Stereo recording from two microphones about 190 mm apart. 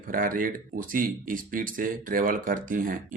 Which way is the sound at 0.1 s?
45° right (ahead or behind).